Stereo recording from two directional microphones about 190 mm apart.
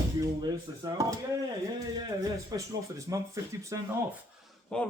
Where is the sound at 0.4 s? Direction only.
20° right (ahead or behind).